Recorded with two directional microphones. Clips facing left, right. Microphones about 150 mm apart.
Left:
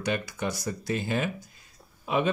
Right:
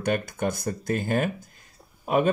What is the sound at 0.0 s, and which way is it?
Speech, 50° right (ahead or behind).